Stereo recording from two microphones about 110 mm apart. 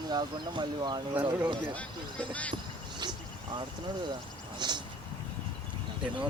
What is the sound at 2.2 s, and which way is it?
Speech, 15° left (ahead or behind).